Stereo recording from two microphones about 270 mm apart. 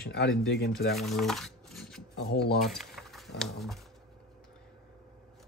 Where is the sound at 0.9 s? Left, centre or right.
Centre.